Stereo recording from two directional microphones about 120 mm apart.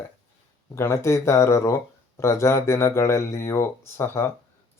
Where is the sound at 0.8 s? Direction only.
25° left (ahead or behind).